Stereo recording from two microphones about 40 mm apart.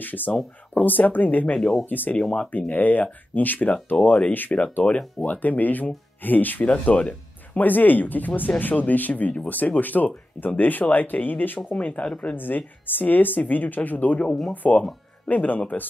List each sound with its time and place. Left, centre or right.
0.0 s speech: left
3.7 s speech: left
4.3 s speech: left
4.8 s speech: left
5.2 s speech: left
6.7 s speech: left
7.6 s speech: left
12.4 s speech: left